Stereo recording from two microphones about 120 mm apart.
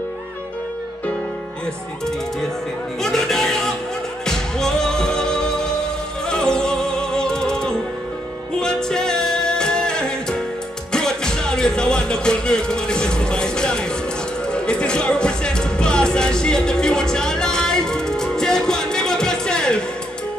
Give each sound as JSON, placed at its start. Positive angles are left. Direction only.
{"t": 3.0, "sound": "music", "side_deg": 5}